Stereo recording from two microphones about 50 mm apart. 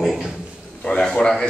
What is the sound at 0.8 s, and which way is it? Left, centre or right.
Speech, centre.